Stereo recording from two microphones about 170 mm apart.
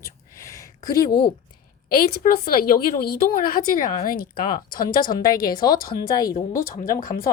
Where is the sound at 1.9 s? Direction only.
60° left (ahead or behind).